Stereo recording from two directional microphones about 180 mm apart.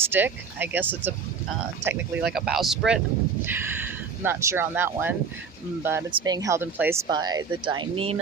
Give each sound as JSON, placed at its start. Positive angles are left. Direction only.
{"t": 0.0, "sound": "speech", "side_deg": -10}
{"t": 6.1, "sound": "speech", "side_deg": -25}
{"t": 7.1, "sound": "speech", "side_deg": -20}